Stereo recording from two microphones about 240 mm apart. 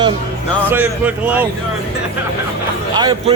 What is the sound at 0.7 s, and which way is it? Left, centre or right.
Speech, centre.